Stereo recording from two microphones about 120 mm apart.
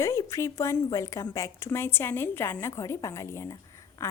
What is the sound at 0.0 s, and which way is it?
A woman's voice, 25° left (ahead or behind).